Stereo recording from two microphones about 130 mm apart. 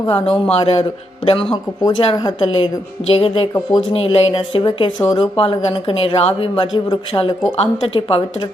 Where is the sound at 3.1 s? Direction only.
45° left (ahead or behind).